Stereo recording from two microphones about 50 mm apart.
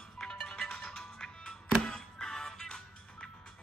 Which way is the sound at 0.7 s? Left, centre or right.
Left.